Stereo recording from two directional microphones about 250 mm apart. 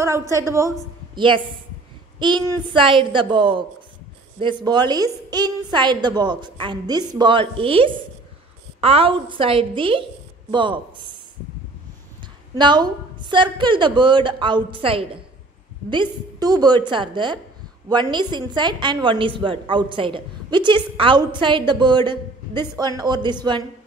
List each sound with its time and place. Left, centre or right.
0.5 s a woman's voice: centre
2.1 s a sound: centre
2.7 s a woman's voice: centre
12.5 s a woman's voice: centre